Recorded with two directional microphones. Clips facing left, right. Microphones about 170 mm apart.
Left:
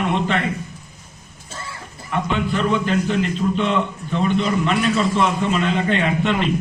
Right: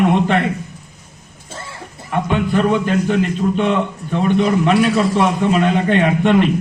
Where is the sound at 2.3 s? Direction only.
50° right (ahead or behind).